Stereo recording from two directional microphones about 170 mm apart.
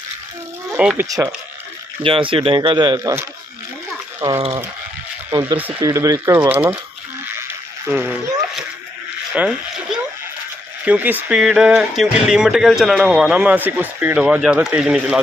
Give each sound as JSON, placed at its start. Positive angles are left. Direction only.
{"t": 0.7, "sound": "speech", "side_deg": -10}
{"t": 1.0, "sound": "speech", "side_deg": -20}
{"t": 2.0, "sound": "speech", "side_deg": -30}
{"t": 4.4, "sound": "speech", "side_deg": -30}
{"t": 5.3, "sound": "speech", "side_deg": -15}
{"t": 7.9, "sound": "speech", "side_deg": -10}
{"t": 9.3, "sound": "speech", "side_deg": -5}